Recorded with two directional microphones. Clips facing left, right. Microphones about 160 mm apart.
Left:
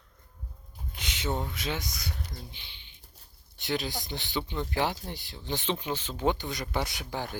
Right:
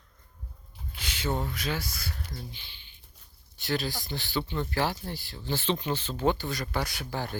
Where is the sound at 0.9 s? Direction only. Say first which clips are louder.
Right 1 dB; 20° left (ahead or behind).